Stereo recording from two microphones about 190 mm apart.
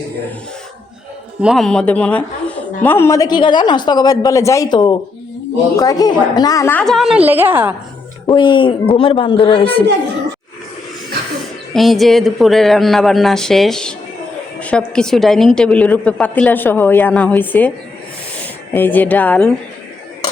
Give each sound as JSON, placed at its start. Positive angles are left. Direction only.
{"t": 1.4, "sound": "a woman's voice", "side_deg": 0}
{"t": 8.3, "sound": "a woman's voice", "side_deg": 25}
{"t": 11.7, "sound": "a woman's voice", "side_deg": 0}
{"t": 18.7, "sound": "a woman's voice", "side_deg": 10}